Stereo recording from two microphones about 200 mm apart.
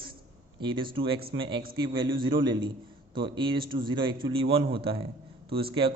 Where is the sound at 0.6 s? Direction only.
25° right (ahead or behind).